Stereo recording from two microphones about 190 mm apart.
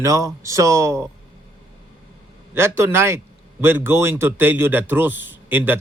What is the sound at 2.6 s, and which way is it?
A man's voice, 15° right (ahead or behind).